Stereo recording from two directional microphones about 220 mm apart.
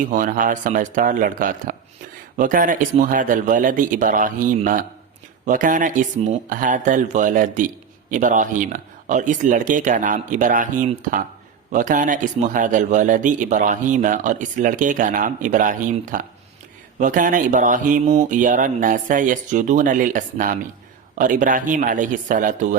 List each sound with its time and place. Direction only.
0.1 s a man's voice: 35° right (ahead or behind)